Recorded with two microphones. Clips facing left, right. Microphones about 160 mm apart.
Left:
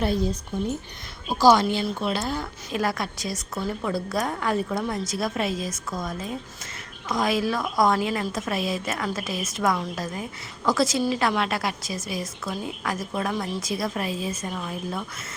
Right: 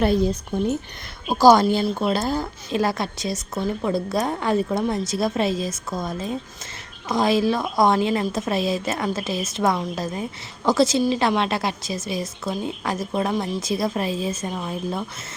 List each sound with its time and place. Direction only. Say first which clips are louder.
1.3 s a woman's voice: right 4 dB; 45° right (ahead or behind); by 15.0 s 25° right (ahead or behind)